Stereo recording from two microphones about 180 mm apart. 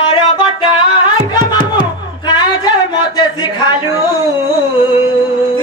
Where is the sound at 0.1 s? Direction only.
30° left (ahead or behind).